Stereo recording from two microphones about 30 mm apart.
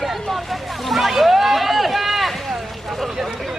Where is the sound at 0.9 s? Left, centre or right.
Centre.